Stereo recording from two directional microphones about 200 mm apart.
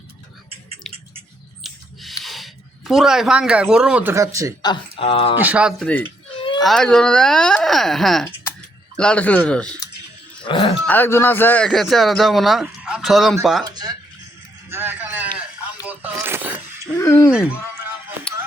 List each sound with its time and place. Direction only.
0.9 s drip: centre (ahead or behind)
1.6 s a sound: centre (ahead or behind); by 4.5 s 15° right (ahead or behind)
4.6 s speech: 25° left (ahead or behind)
5.4 s a man's voice: 5° right (ahead or behind)
10.4 s speech: 25° left (ahead or behind)
10.8 s a man's voice: 10° left (ahead or behind)
13.7 s a sound: 20° right (ahead or behind)
17.0 s speech: 15° left (ahead or behind)